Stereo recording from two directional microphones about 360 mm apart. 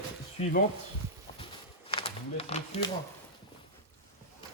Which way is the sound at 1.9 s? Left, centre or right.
Centre.